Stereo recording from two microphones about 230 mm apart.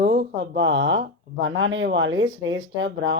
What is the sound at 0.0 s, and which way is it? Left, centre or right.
Speech, right.